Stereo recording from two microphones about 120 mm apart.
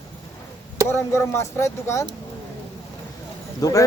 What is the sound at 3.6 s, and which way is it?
Speech, 30° left (ahead or behind).